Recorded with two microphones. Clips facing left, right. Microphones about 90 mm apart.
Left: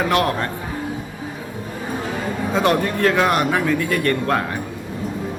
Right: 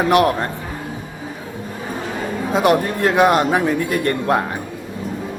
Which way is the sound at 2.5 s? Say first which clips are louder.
Right 3 dB; 20° right (ahead or behind).